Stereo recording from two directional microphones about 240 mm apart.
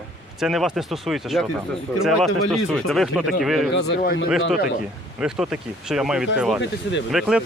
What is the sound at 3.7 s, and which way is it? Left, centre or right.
Speech, left.